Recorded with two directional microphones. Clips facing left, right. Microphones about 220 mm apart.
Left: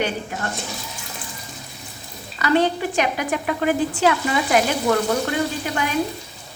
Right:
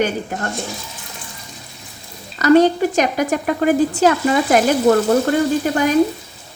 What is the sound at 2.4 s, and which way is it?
A woman's voice, 40° right (ahead or behind).